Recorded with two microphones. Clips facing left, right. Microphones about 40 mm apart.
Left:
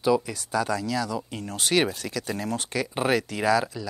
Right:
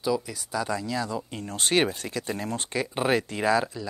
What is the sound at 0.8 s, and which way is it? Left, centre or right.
Speech, right.